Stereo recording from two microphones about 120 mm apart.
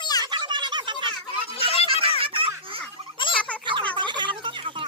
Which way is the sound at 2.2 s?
50° right (ahead or behind).